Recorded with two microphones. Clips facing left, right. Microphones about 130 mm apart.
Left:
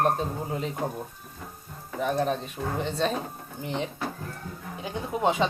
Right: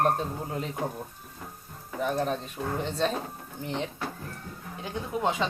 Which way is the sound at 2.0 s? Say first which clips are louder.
Left 2 dB; 5° left (ahead or behind).